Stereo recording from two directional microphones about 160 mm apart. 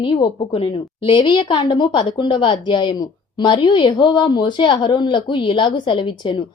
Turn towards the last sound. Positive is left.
turn(degrees=30)  # may be behind; listen again after turning